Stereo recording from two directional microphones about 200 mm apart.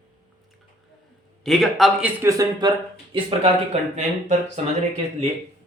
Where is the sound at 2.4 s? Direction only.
20° right (ahead or behind).